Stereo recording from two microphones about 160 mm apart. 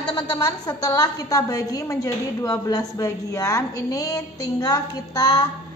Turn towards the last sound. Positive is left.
turn(degrees=25)  # may be behind; listen again after turning